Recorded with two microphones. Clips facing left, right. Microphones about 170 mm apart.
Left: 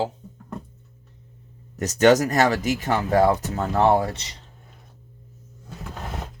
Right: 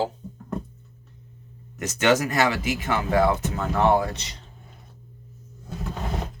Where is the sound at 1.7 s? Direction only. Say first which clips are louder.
Left 5 dB; 40° left (ahead or behind).